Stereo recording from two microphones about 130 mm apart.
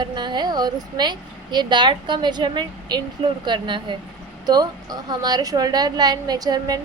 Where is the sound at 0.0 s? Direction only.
35° right (ahead or behind).